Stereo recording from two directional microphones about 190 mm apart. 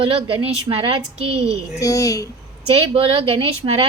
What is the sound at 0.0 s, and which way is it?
A woman's voice, 30° right (ahead or behind).